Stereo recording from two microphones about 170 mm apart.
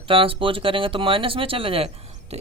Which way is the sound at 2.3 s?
40° right (ahead or behind).